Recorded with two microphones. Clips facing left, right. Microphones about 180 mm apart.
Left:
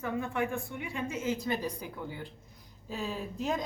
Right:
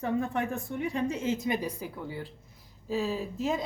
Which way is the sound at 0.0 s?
35° right (ahead or behind).